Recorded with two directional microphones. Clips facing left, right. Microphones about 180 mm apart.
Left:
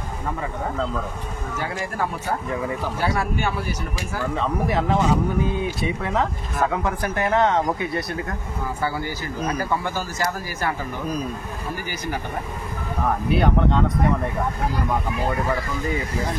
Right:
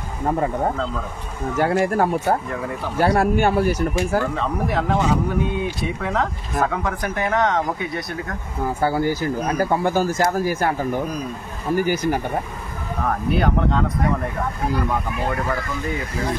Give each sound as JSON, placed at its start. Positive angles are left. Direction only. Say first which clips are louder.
{"t": 1.6, "sound": "speech", "louder": "right 9 dB", "side_deg": -50}
{"t": 4.4, "sound": "speech", "louder": "even", "side_deg": 0}
{"t": 8.8, "sound": "speech", "louder": "right 8 dB", "side_deg": -55}
{"t": 13.0, "sound": "speech", "louder": "even", "side_deg": 0}